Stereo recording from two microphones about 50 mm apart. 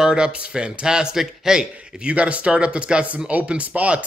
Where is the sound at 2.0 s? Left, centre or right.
Right.